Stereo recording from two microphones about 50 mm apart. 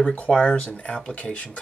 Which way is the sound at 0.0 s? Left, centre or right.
Left.